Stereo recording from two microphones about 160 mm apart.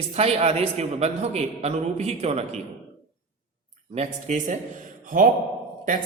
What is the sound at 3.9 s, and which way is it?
Speech, 45° right (ahead or behind).